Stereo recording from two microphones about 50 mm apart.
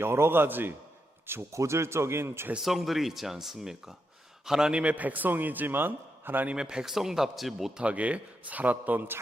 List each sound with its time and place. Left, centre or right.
0.0 s a man's voice: right
1.5 s speech: right
2.6 s a man's voice: centre; by 6.5 s right
6.5 s speech: centre
7.8 s a man's voice: right